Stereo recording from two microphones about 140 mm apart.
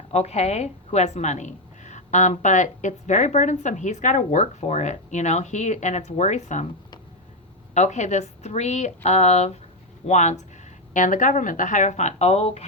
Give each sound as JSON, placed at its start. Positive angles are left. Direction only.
{"t": 0.1, "sound": "a woman's voice", "side_deg": 50}
{"t": 7.7, "sound": "a woman's voice", "side_deg": 55}